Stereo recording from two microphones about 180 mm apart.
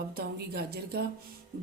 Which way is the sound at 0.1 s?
60° right (ahead or behind).